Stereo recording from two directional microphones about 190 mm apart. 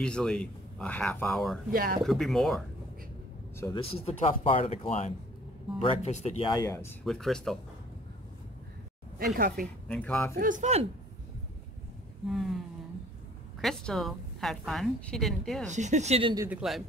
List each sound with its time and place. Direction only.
0.0 s a woman's voice: 5° left (ahead or behind)
1.7 s speech: 50° right (ahead or behind)
2.0 s a woman's voice: centre (ahead or behind)
3.5 s speech: 15° left (ahead or behind)
3.8 s speech: 30° left (ahead or behind)
7.1 s a woman's voice: centre (ahead or behind)
9.8 s speech: 5° left (ahead or behind)
10.3 s speech: 45° right (ahead or behind)
12.3 s a woman's voice: centre (ahead or behind)
13.6 s a woman's voice: centre (ahead or behind)
15.7 s speech: 40° right (ahead or behind)
16.6 s a woman's voice: centre (ahead or behind)